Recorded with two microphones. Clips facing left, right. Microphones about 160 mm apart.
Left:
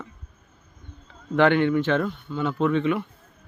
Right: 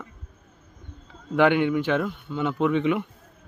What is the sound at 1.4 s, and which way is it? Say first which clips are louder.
A man's voice: left 1 dB; 10° right (ahead or behind).